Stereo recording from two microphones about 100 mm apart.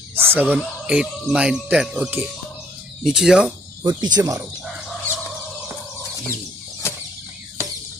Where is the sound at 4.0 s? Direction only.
40° right (ahead or behind).